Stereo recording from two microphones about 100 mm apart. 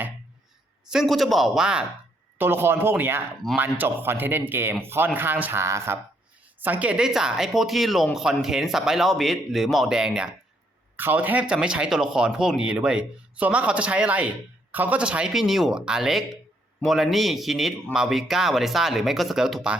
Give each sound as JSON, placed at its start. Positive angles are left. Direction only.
{"t": 0.9, "sound": "a man's voice", "side_deg": 0}
{"t": 2.4, "sound": "speech", "side_deg": -25}
{"t": 6.6, "sound": "a man's voice", "side_deg": -15}
{"t": 10.9, "sound": "a man's voice", "side_deg": -20}